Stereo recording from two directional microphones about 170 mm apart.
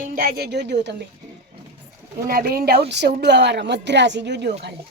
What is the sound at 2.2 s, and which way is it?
A woman's voice, 60° right (ahead or behind).